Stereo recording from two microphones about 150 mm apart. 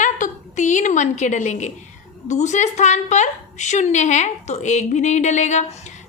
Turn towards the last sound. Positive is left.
turn(degrees=50)  # may be behind; listen again after turning